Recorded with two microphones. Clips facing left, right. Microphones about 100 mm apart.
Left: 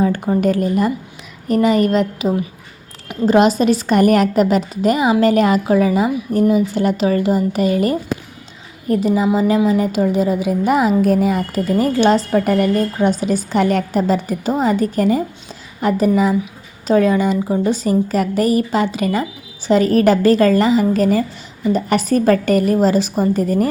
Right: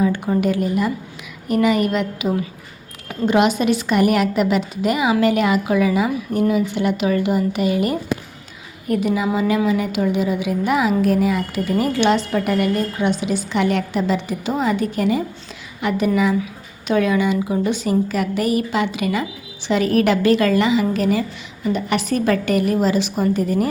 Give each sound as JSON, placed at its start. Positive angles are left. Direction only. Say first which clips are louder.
{"t": 0.4, "sound": "a woman's voice", "louder": "left 5 dB", "side_deg": 40}
{"t": 3.2, "sound": "a woman's voice", "louder": "left 4 dB", "side_deg": 35}